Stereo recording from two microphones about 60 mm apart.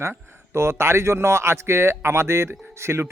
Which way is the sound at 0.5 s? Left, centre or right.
Right.